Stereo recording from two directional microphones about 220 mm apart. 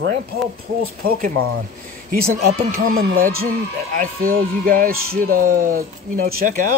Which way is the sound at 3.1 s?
70° right (ahead or behind).